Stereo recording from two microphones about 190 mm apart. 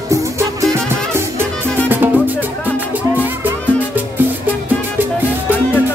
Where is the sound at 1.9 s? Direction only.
10° right (ahead or behind).